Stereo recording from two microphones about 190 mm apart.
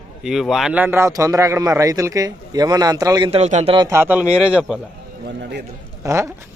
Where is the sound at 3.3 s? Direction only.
35° right (ahead or behind).